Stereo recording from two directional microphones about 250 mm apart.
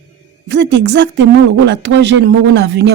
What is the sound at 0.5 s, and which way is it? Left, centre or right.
Speech, right.